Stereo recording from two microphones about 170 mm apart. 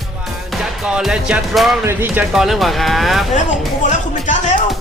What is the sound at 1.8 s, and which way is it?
Speech, 10° right (ahead or behind).